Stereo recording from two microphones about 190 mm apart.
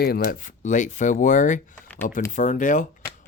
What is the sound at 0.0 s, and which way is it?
Speech, 55° left (ahead or behind).